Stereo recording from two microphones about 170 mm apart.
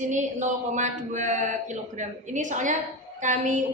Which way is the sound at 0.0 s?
45° right (ahead or behind).